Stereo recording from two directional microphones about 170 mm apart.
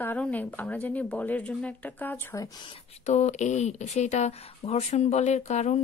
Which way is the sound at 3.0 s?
40° left (ahead or behind).